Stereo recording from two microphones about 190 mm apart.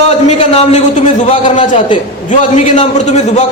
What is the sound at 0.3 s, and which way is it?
Speech, 35° left (ahead or behind).